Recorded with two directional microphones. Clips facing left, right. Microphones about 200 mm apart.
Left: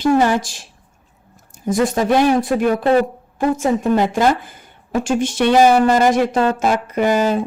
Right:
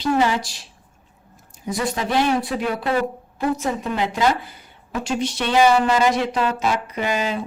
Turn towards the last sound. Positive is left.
turn(degrees=45)  # may be behind; listen again after turning